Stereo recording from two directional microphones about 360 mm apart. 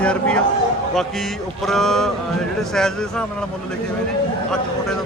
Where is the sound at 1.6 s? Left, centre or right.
Centre.